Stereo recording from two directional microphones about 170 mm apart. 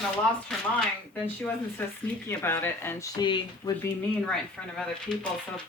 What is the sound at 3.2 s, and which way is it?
Speech, 25° left (ahead or behind).